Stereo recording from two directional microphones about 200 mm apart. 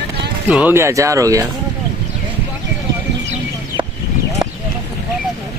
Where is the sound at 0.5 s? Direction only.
5° right (ahead or behind).